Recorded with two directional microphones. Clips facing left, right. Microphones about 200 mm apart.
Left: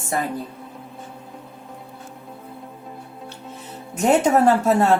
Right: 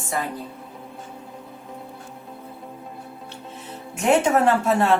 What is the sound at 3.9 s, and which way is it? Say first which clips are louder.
Speech: left 2 dB; 40° left (ahead or behind).